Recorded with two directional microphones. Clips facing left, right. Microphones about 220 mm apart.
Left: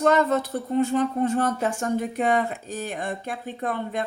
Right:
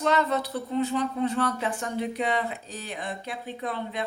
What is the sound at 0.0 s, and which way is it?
Speech, 45° left (ahead or behind).